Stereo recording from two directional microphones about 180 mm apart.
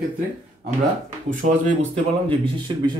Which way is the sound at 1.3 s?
45° right (ahead or behind).